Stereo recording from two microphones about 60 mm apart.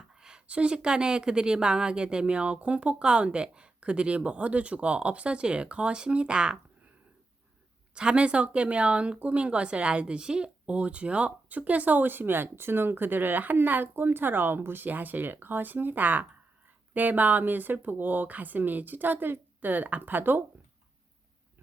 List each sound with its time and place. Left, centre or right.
0.1 s a woman's voice: centre
7.9 s speech: centre; by 20.4 s right